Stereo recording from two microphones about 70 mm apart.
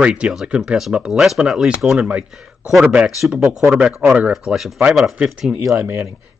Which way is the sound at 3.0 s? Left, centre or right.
Centre.